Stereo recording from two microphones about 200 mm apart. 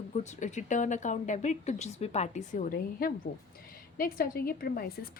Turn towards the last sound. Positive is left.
turn(degrees=50)  # may be behind; listen again after turning